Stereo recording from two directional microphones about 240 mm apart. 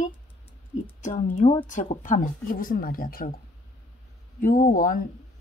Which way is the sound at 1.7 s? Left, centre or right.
Left.